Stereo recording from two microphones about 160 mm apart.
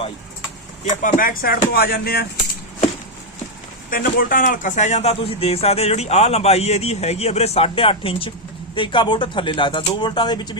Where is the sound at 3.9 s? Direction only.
60° left (ahead or behind).